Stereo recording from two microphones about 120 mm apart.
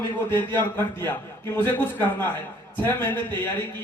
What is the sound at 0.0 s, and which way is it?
A man's voice, 20° left (ahead or behind).